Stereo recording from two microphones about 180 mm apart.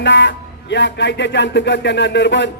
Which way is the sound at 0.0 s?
85° left.